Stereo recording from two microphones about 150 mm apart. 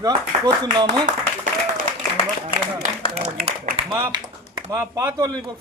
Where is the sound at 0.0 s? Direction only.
25° right (ahead or behind).